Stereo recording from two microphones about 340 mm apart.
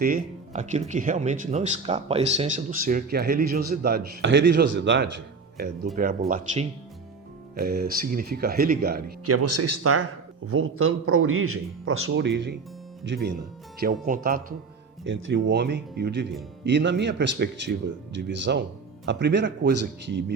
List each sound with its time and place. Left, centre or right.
0.0 s speech: right
9.2 s a man's voice: right
13.7 s a man's voice: right